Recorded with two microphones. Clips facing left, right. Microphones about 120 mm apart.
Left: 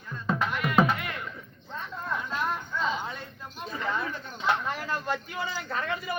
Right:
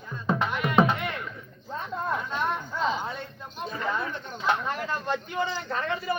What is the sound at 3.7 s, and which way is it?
A man's voice, centre (ahead or behind).